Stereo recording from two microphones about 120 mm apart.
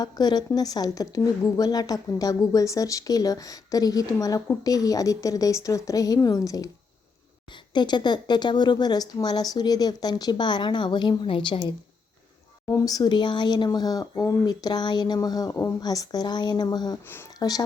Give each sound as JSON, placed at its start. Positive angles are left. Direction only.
{"t": 0.0, "sound": "speech", "side_deg": 35}
{"t": 7.5, "sound": "speech", "side_deg": 40}
{"t": 12.6, "sound": "speech", "side_deg": 30}